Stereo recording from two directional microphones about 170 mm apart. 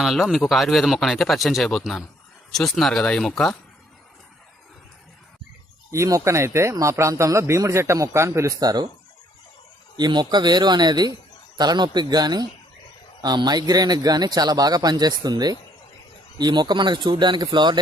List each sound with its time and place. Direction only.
0.0 s speech: centre (ahead or behind)
5.9 s speech: 20° right (ahead or behind)
10.0 s speech: 25° right (ahead or behind)